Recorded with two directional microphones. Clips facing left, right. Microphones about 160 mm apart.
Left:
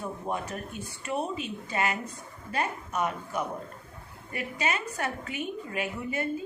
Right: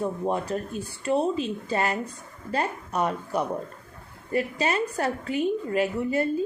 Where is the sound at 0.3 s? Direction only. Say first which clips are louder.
Right 6 dB; 30° right (ahead or behind).